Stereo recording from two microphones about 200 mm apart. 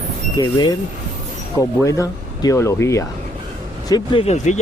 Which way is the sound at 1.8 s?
15° left (ahead or behind).